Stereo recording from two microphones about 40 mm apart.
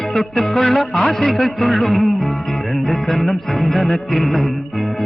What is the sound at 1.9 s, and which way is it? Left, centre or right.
Music, centre.